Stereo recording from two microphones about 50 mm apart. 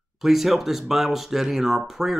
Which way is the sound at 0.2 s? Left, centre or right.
Centre.